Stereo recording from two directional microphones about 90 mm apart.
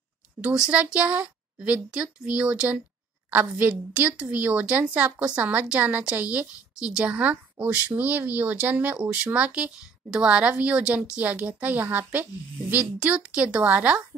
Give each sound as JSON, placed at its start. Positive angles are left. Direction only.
{"t": 0.4, "sound": "a woman's voice", "side_deg": -15}